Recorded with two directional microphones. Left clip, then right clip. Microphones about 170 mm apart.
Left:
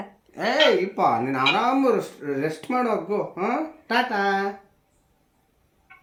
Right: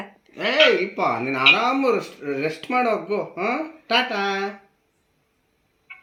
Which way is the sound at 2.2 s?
10° left (ahead or behind).